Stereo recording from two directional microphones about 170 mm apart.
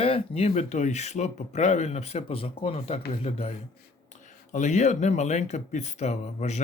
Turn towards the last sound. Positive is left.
turn(degrees=40)  # may be behind; listen again after turning